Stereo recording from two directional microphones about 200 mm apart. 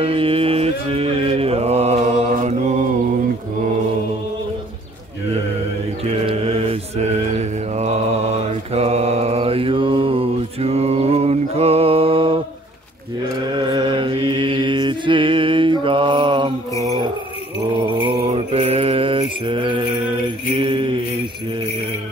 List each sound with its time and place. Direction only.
0.0 s mantra: 25° right (ahead or behind)
6.0 s mantra: 30° right (ahead or behind)
13.5 s mantra: 25° right (ahead or behind)
17.9 s mantra: 25° right (ahead or behind)
20.5 s jingle bell: 25° right (ahead or behind)